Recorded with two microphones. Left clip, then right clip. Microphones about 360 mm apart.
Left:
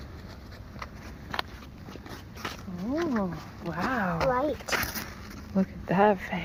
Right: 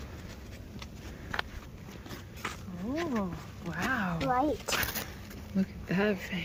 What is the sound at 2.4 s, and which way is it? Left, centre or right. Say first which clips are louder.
Wild animals: left 2 dB; left.